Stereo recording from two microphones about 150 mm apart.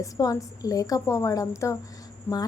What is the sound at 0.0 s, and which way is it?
A woman's voice, 25° left (ahead or behind).